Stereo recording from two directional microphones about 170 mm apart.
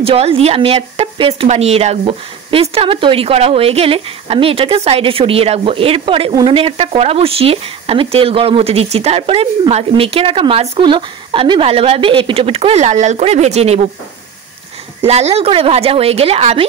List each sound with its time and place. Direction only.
0.0 s speech: 35° right (ahead or behind)
15.0 s speech: 40° right (ahead or behind)